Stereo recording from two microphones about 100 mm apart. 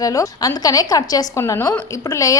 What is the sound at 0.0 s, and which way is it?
A woman's voice, 35° left (ahead or behind).